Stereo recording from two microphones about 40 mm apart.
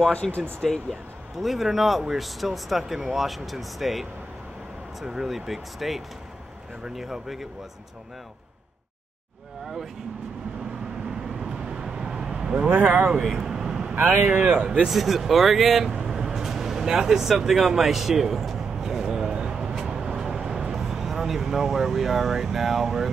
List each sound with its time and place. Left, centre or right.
0.2 s speech: centre
1.4 s speech: centre
5.0 s speech: centre
5.3 s speech: centre
11.1 s vehicle: centre
13.9 s speech: right
14.2 s a man's voice: right
14.9 s speech: centre
16.1 s vehicle: centre